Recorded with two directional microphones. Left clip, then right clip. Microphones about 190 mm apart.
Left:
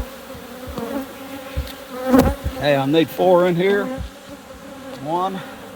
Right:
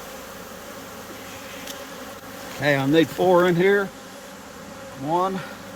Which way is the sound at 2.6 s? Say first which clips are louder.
Left 2 dB; 30° left (ahead or behind).